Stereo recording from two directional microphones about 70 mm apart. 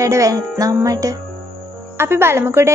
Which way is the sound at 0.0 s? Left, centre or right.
Right.